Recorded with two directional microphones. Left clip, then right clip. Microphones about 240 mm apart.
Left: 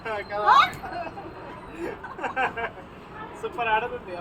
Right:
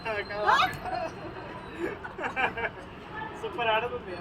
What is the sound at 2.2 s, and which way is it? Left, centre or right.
Speech, centre.